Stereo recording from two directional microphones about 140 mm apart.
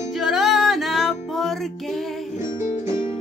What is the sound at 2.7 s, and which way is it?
Music, 35° left (ahead or behind).